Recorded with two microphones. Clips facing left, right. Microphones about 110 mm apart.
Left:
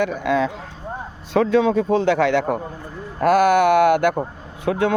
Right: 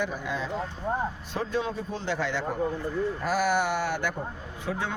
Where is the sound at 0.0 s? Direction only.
75° left (ahead or behind).